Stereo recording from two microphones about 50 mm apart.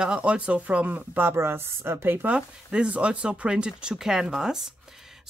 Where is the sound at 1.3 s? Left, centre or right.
Right.